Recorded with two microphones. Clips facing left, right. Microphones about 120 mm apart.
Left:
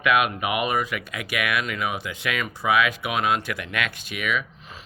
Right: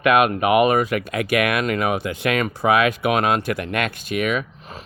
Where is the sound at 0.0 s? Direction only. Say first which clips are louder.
Right 5 dB; 50° right (ahead or behind).